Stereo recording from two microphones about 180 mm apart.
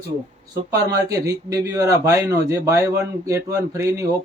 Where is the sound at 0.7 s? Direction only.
20° right (ahead or behind).